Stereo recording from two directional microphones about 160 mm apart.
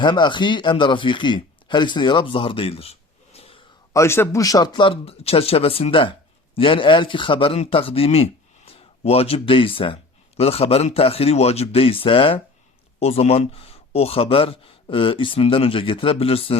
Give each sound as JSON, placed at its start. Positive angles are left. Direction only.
{"t": 0.0, "sound": "speech", "side_deg": 30}
{"t": 3.9, "sound": "speech", "side_deg": 15}